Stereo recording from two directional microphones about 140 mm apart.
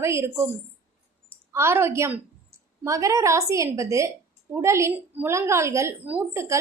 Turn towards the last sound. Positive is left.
turn(degrees=-20)  # may be behind; listen again after turning